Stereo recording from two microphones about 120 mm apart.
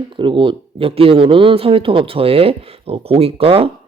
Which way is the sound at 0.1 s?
45° right (ahead or behind).